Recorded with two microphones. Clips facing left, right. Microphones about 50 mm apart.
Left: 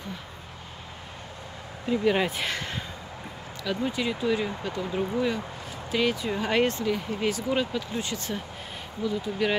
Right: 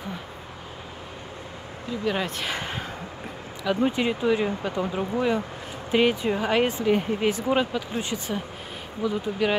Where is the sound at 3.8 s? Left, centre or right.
Right.